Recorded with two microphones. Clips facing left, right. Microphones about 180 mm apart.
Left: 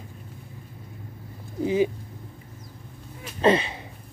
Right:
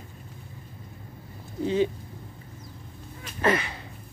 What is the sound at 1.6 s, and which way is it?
Speech, 10° left (ahead or behind).